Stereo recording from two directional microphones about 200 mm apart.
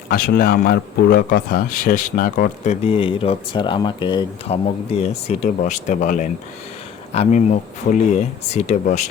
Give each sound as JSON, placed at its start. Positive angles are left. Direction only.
{"t": 0.1, "sound": "speech", "side_deg": 45}
{"t": 2.8, "sound": "speech", "side_deg": 30}